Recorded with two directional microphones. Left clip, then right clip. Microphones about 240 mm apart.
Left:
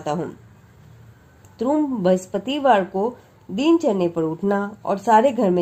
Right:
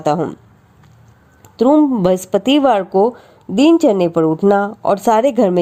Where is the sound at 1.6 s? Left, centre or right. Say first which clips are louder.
Right 9 dB; right.